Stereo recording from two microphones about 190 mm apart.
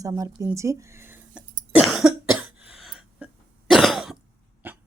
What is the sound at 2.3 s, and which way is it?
Throat clearing, 5° right (ahead or behind).